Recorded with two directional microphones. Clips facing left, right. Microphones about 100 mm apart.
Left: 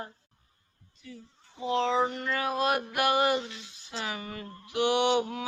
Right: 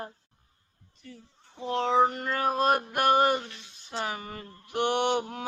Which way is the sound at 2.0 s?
45° right (ahead or behind).